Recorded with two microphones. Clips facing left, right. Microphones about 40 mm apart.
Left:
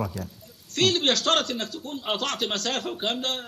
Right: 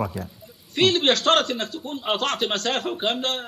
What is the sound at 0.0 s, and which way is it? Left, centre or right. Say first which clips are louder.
A man's voice: right 3 dB; centre.